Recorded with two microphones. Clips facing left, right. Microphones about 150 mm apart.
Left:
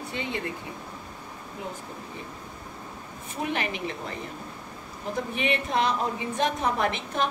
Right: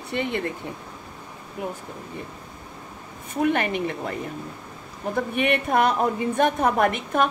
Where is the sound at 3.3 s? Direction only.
55° right (ahead or behind).